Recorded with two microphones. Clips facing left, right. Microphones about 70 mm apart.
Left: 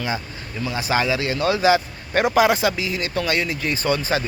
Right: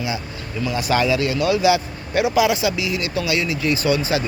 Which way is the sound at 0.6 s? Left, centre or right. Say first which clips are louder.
Right 2 dB; left.